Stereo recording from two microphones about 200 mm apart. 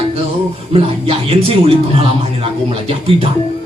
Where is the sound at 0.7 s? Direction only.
30° right (ahead or behind).